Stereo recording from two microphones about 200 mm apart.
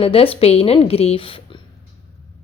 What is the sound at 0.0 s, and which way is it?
A woman's voice, 30° left (ahead or behind).